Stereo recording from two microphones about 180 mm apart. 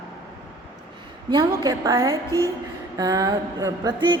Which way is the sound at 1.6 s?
20° right (ahead or behind).